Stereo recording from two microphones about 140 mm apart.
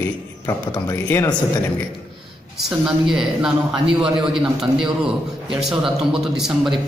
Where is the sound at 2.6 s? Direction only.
5° right (ahead or behind).